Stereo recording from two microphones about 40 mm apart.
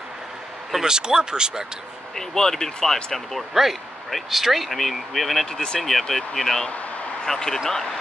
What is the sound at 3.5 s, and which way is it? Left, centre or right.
Speech, centre.